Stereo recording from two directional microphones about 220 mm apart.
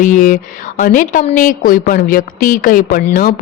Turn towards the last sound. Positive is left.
turn(degrees=40)  # may be behind; listen again after turning